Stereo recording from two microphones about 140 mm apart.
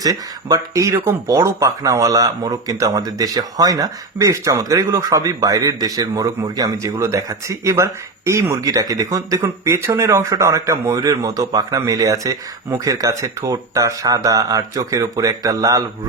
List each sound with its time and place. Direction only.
0.0 s speech: 25° right (ahead or behind)